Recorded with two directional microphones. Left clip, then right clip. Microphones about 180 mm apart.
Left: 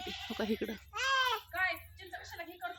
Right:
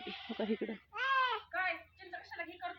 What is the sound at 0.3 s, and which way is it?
Speech, 15° left (ahead or behind).